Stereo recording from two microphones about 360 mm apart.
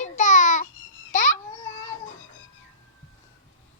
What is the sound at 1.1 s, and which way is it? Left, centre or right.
Babbling, left.